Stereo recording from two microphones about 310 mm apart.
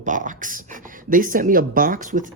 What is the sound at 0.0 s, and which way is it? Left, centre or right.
Speech, right.